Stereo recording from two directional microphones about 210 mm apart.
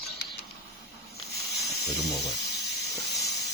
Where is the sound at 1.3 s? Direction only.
Centre (ahead or behind).